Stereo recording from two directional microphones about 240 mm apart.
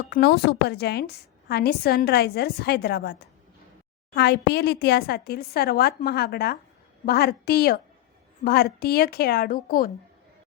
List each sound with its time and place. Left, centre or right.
0.1 s a woman's voice: left